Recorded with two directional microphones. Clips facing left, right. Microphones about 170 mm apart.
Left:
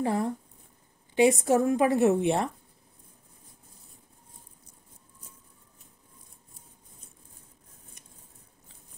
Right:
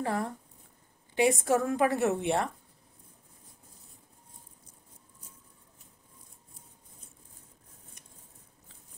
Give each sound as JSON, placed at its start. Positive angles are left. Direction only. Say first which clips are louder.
{"t": 0.0, "sound": "a woman's voice", "louder": "left 4 dB", "side_deg": 20}